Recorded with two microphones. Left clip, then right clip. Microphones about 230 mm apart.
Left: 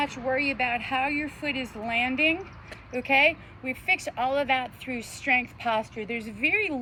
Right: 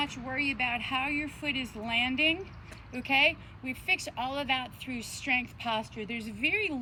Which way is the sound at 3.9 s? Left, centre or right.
Left.